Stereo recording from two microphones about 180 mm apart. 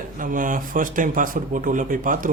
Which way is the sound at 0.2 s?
50° right (ahead or behind).